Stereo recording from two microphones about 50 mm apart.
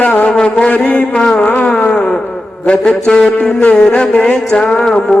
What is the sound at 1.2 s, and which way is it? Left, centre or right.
Music, centre.